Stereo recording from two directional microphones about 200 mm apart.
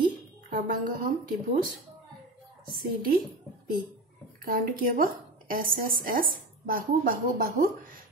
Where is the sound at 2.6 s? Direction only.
45° right (ahead or behind).